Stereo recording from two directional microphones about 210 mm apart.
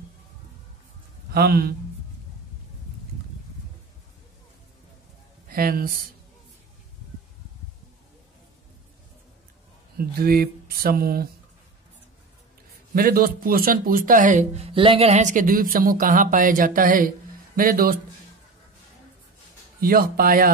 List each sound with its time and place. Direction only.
1.3 s speech: 45° right (ahead or behind)
5.5 s speech: 45° right (ahead or behind)
9.9 s speech: 45° right (ahead or behind)
12.9 s speech: 45° right (ahead or behind)
19.8 s speech: 45° right (ahead or behind)